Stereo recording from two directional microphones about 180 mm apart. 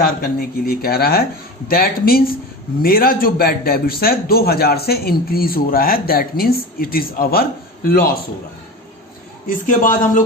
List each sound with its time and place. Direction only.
0.0 s a man's voice: 55° left (ahead or behind)
9.6 s speech: 45° left (ahead or behind)